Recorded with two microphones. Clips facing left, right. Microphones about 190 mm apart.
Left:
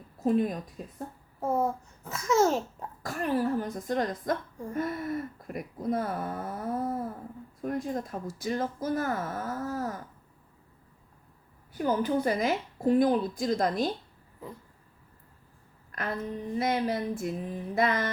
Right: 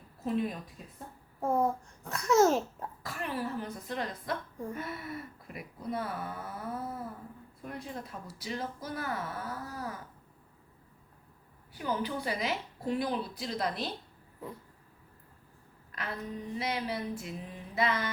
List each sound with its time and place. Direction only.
0.2 s speech: 45° left (ahead or behind)
1.4 s a child's voice: 5° left (ahead or behind)
3.0 s speech: 45° left (ahead or behind)
11.7 s speech: 45° left (ahead or behind)
15.9 s a sound: 45° left (ahead or behind)
16.6 s speech: 50° left (ahead or behind)